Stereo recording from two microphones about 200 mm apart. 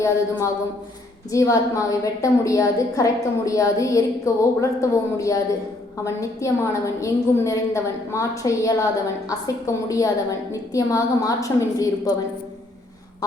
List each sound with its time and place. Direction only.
0.0 s a woman's voice: 15° left (ahead or behind)